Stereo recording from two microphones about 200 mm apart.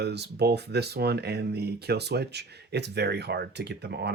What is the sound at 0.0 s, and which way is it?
Speech, 55° right (ahead or behind).